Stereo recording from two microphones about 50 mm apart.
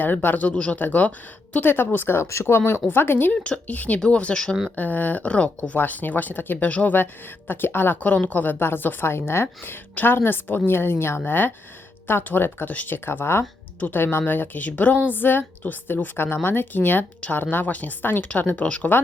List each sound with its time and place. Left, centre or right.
0.0 s a woman's voice: left
2.2 s a woman's voice: left
3.7 s speech: left
4.7 s speech: left
9.9 s a woman's voice: left
13.1 s a woman's voice: left
13.7 s a woman's voice: left
15.1 s a woman's voice: left